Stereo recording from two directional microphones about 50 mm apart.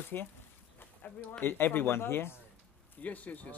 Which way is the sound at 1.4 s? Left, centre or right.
Left.